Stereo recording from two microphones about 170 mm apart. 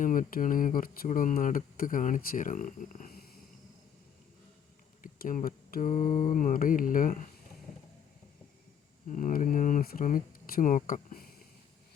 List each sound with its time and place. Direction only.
0.0 s speech: 50° left (ahead or behind)
5.0 s speech: 50° left (ahead or behind)
6.1 s mantra: 25° left (ahead or behind)
6.3 s speech: 55° left (ahead or behind)
9.1 s speech: 50° left (ahead or behind)